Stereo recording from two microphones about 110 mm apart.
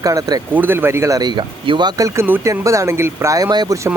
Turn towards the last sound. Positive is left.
turn(degrees=-35)  # may be behind; listen again after turning